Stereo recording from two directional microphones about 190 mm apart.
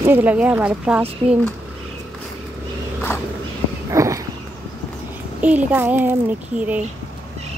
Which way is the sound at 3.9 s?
15° right (ahead or behind).